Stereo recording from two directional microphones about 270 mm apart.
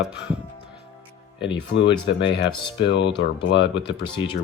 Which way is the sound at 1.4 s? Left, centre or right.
Centre.